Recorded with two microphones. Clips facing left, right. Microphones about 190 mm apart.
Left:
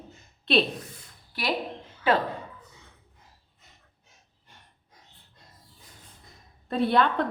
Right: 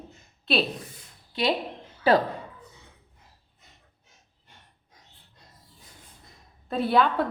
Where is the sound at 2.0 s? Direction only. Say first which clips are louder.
Right 3 dB; 40° right (ahead or behind).